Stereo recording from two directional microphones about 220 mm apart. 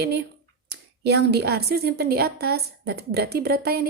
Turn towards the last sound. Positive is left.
turn(degrees=-45)  # may be behind; listen again after turning